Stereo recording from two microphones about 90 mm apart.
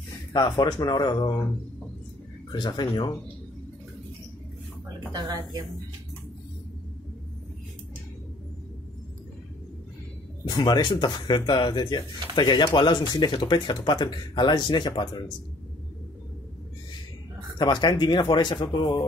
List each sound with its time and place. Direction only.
0.4 s speech: 40° left (ahead or behind)
2.5 s speech: 55° left (ahead or behind)
5.1 s speech: 45° right (ahead or behind)
10.9 s speech: 60° left (ahead or behind)
17.6 s speech: 55° left (ahead or behind)